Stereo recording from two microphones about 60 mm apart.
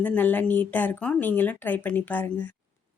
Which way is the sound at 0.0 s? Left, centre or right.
Left.